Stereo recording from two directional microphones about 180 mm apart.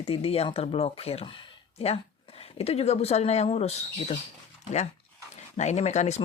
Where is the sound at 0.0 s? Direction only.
30° left (ahead or behind).